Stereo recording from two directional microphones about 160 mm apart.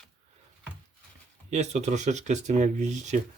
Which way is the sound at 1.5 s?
45° right (ahead or behind).